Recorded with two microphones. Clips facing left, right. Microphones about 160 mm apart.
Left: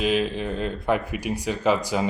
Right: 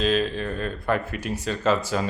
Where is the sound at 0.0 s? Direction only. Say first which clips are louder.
Even; 15° left (ahead or behind).